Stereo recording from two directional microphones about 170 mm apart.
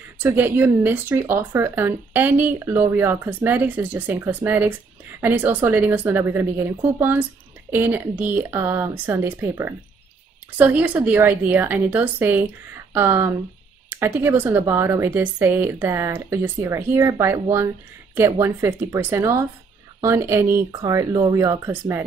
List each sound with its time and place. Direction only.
0.2 s speech: 10° right (ahead or behind)